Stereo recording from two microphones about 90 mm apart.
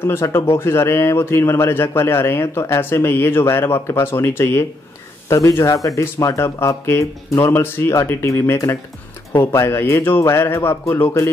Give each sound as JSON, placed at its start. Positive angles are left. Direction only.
{"t": 0.0, "sound": "speech", "side_deg": 25}